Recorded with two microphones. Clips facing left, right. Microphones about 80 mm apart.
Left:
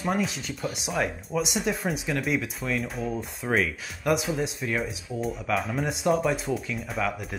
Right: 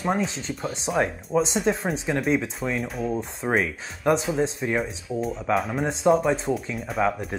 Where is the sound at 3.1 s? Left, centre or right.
Right.